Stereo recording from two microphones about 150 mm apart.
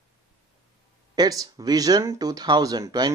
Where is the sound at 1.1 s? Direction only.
25° right (ahead or behind).